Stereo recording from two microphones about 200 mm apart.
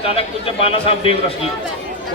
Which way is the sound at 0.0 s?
25° left (ahead or behind).